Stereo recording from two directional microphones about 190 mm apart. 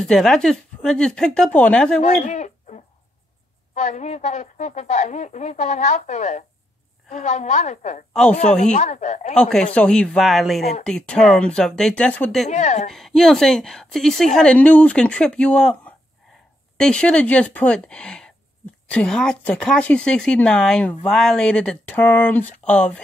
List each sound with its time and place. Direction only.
0.1 s speech: centre (ahead or behind)
2.0 s a sound: 40° left (ahead or behind)
3.7 s speech: 35° left (ahead or behind)
8.1 s a man's voice: 5° left (ahead or behind)
8.6 s speech: 40° left (ahead or behind)
9.3 s speech: 5° left (ahead or behind)
12.4 s speech: 40° left (ahead or behind)
12.9 s speech: centre (ahead or behind)